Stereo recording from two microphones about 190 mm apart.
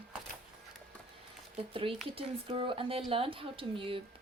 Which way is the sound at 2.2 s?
30° right (ahead or behind).